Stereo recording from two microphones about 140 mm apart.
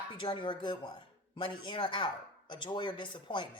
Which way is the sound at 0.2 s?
35° left (ahead or behind).